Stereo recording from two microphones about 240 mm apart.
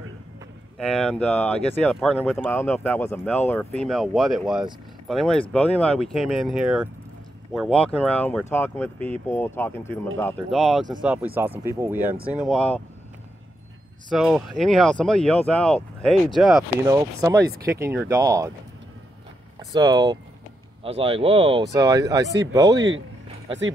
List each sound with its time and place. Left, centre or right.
0.7 s speech: centre
14.1 s speech: centre
16.8 s speech: centre
19.7 s speech: centre